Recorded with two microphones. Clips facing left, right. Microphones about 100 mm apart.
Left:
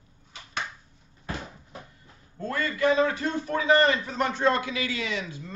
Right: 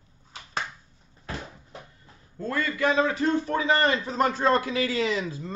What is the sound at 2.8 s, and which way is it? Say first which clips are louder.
A man's voice: left 1 dB; 25° right (ahead or behind).